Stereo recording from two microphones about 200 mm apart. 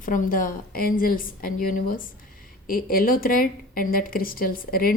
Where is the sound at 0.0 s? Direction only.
40° left (ahead or behind).